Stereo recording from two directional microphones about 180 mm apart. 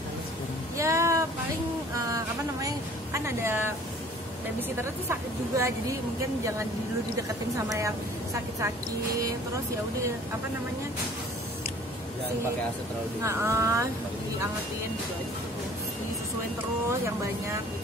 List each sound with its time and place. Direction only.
0.7 s a sound: 15° right (ahead or behind)
2.6 s speech: 15° right (ahead or behind)
5.1 s speech: 15° right (ahead or behind)
7.5 s speech: 15° right (ahead or behind)
13.2 s speech: 15° right (ahead or behind)